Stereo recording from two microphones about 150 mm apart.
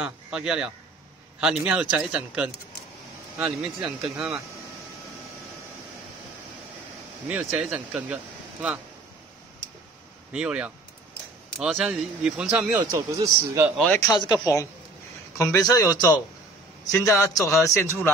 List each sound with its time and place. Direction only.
0.0 s speech: 5° right (ahead or behind)
7.2 s speech: 5° right (ahead or behind)
10.3 s speech: 5° right (ahead or behind)
12.7 s speech: 25° right (ahead or behind)
14.0 s a man's voice: 30° left (ahead or behind)